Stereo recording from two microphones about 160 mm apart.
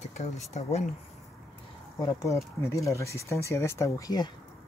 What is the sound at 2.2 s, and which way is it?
Speech, 20° left (ahead or behind).